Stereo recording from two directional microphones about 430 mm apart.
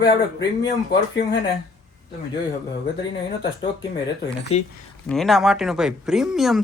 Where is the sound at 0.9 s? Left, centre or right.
Left.